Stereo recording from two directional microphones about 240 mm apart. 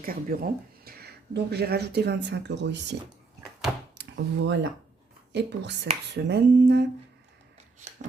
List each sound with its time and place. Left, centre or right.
0.0 s speech: right
3.9 s a sound: right
5.3 s speech: right